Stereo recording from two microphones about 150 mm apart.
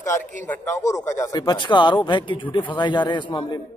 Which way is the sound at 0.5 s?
10° left (ahead or behind).